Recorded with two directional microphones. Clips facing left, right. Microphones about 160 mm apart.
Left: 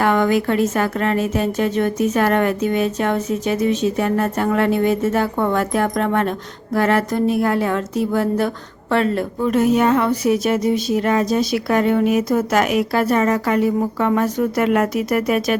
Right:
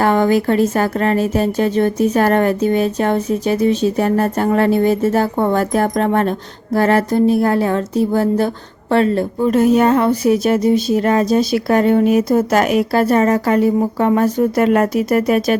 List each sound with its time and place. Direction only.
0.0 s speech: 35° right (ahead or behind)